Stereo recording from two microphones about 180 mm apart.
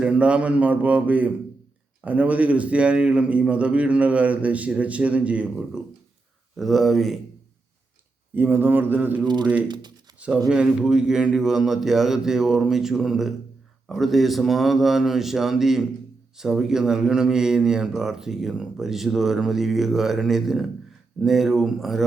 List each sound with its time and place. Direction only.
0.0 s a man's voice: 5° right (ahead or behind)
8.4 s a man's voice: 10° right (ahead or behind)
9.2 s speech: 25° right (ahead or behind)
10.2 s speech: 5° right (ahead or behind)